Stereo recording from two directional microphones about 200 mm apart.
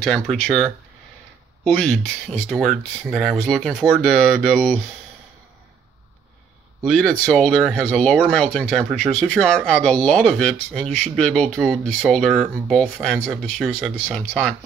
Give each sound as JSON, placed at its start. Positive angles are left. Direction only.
{"t": 0.0, "sound": "speech", "side_deg": 0}
{"t": 1.7, "sound": "speech", "side_deg": 5}
{"t": 6.8, "sound": "speech", "side_deg": 5}